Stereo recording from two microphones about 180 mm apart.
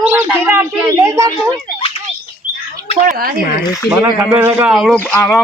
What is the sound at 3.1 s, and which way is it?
Speech, 55° right (ahead or behind).